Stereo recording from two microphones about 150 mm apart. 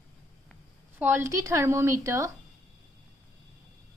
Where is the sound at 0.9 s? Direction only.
15° right (ahead or behind).